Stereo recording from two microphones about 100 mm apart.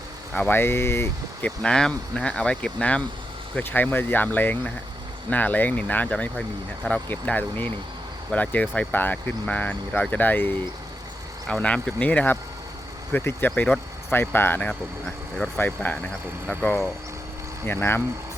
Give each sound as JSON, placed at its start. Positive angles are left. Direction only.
{"t": 0.3, "sound": "speech", "side_deg": 20}
{"t": 1.5, "sound": "speech", "side_deg": 10}
{"t": 17.7, "sound": "speech", "side_deg": 20}